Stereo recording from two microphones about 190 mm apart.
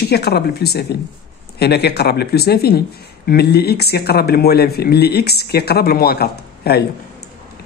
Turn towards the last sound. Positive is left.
turn(degrees=55)  # may be behind; listen again after turning